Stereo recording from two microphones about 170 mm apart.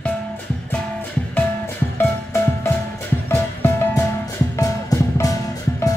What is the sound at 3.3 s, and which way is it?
Music, 15° left (ahead or behind).